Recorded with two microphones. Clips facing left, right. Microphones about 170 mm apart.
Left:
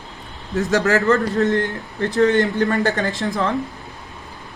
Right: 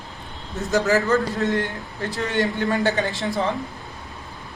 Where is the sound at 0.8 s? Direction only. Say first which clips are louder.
Left 2 dB; 70° left (ahead or behind).